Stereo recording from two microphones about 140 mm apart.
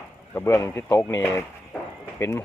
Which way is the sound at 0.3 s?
20° left (ahead or behind).